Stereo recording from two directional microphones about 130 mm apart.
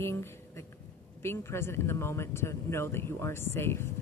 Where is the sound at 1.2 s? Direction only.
20° left (ahead or behind).